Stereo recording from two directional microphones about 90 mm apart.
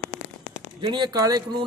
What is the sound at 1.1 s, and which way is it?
Speech, 40° right (ahead or behind).